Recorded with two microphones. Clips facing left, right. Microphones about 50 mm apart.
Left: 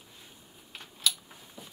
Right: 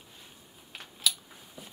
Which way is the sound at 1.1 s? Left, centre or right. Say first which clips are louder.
Even; centre.